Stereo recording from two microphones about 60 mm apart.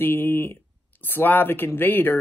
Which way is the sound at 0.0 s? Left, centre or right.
Left.